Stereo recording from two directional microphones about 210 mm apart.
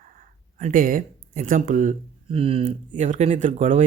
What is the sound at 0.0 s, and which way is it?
Speech, 35° right (ahead or behind).